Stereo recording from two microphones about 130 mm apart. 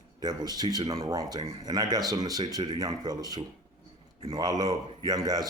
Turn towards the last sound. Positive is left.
turn(degrees=-30)  # may be behind; listen again after turning